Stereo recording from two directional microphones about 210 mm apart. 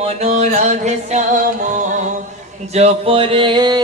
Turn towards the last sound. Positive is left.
turn(degrees=-20)  # may be behind; listen again after turning